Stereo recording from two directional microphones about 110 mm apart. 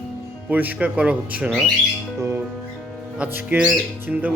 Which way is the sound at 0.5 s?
15° right (ahead or behind).